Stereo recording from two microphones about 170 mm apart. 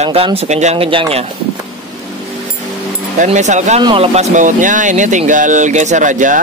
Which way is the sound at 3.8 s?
35° right (ahead or behind).